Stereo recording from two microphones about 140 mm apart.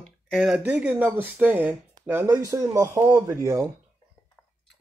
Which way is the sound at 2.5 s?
25° right (ahead or behind).